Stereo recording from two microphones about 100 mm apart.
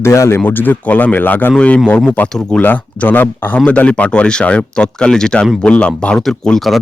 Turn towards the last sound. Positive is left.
turn(degrees=5)  # may be behind; listen again after turning